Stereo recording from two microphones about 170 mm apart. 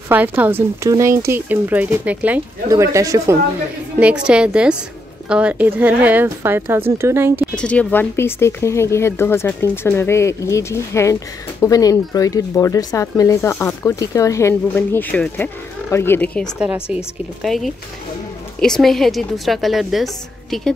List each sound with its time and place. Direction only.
0.4 s speech: 10° right (ahead or behind)
4.0 s a woman's voice: 5° right (ahead or behind)
7.5 s speech: 5° left (ahead or behind)
16.5 s a woman's voice: 5° right (ahead or behind)